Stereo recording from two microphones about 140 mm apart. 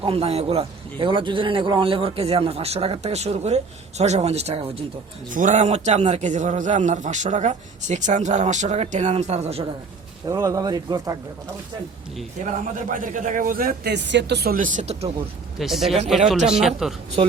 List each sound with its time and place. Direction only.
0.0 s a man's voice: 45° right (ahead or behind)
5.3 s a man's voice: 65° right (ahead or behind); by 9.6 s 45° right (ahead or behind)
10.2 s speech: 25° right (ahead or behind)
12.4 s a man's voice: 70° right (ahead or behind)
15.5 s a man's voice: centre (ahead or behind)